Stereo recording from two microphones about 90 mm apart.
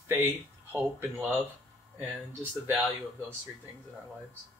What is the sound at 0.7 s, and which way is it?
Speech, 20° right (ahead or behind).